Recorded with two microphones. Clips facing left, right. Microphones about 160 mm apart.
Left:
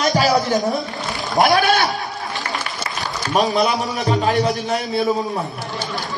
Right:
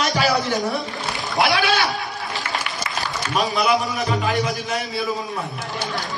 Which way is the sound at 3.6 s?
40° left (ahead or behind).